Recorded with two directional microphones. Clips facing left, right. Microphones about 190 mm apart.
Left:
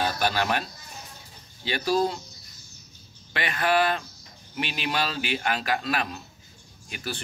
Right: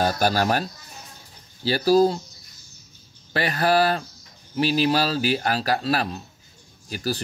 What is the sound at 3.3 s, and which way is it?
Speech, 35° right (ahead or behind).